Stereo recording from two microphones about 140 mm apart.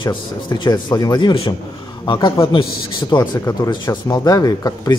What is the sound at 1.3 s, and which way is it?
Speech, 40° left (ahead or behind).